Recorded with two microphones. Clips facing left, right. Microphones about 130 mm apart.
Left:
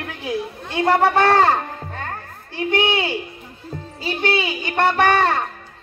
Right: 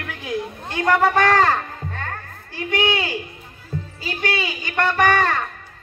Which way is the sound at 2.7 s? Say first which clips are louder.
Left 2 dB; 25° left (ahead or behind).